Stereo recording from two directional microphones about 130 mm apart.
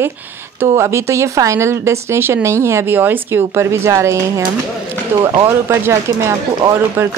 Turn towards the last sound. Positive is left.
turn(degrees=-20)  # may be behind; listen again after turning